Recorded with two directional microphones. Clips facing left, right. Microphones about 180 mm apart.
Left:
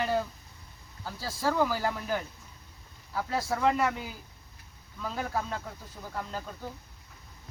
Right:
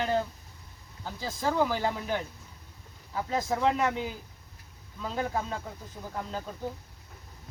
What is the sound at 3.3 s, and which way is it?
Speech, 15° right (ahead or behind).